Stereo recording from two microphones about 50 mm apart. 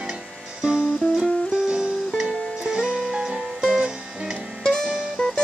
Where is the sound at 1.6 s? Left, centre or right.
Centre.